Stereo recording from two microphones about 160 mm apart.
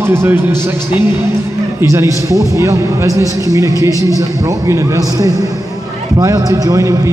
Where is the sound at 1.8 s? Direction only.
20° right (ahead or behind).